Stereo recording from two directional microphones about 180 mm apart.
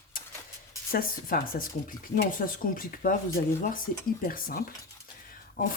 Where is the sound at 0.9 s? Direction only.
55° left (ahead or behind).